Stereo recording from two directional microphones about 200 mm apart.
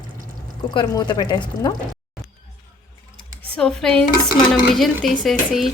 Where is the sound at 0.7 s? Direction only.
20° left (ahead or behind).